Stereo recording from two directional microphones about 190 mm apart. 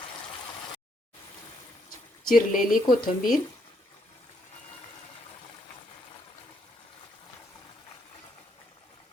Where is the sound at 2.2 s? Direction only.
50° left (ahead or behind).